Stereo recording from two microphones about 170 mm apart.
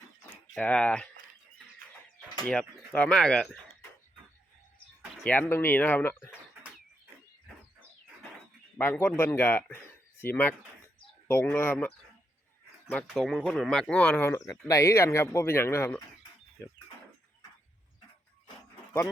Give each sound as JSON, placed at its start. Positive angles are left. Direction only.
{"t": 0.5, "sound": "speech", "side_deg": 5}
{"t": 2.4, "sound": "speech", "side_deg": 5}
{"t": 5.2, "sound": "speech", "side_deg": 10}
{"t": 8.8, "sound": "speech", "side_deg": 15}
{"t": 14.3, "sound": "speech", "side_deg": 20}